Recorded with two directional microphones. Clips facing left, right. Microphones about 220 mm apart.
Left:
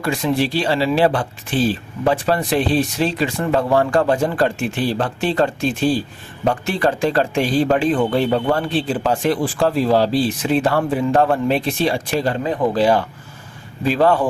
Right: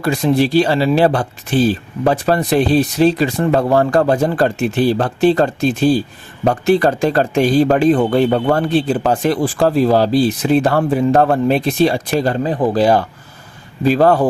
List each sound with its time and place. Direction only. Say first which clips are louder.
0.0 s speech: right 4 dB; 40° right (ahead or behind)